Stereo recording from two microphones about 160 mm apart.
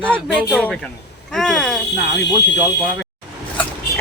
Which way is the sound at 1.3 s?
5° left (ahead or behind).